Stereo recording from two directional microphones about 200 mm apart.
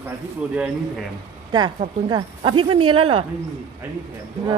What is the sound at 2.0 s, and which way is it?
Speech, 25° right (ahead or behind).